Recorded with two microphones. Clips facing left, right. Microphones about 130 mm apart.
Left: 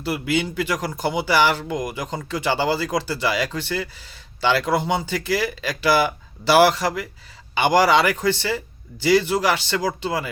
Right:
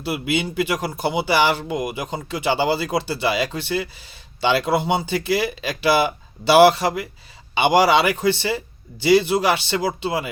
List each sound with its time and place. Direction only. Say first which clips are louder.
0.0 s speech: even; 20° right (ahead or behind)